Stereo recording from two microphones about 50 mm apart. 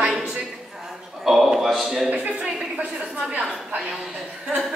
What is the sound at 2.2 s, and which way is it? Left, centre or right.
Speech, right.